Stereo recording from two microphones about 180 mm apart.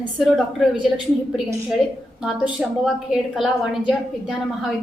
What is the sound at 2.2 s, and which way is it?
A woman's voice, centre (ahead or behind).